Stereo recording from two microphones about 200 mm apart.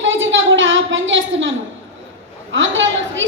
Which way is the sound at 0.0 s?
70° right (ahead or behind).